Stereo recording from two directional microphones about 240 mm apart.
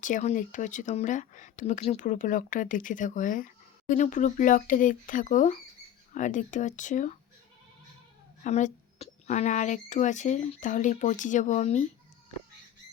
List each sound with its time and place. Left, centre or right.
0.0 s speech: left
8.4 s speech: left